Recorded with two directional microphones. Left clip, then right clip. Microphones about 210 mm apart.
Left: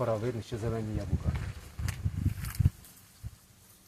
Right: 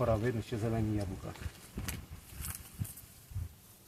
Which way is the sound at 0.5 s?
5° left (ahead or behind).